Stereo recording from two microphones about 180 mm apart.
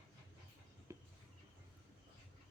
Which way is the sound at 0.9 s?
15° right (ahead or behind).